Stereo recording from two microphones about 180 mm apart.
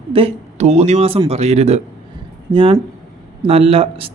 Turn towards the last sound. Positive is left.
turn(degrees=-30)  # may be behind; listen again after turning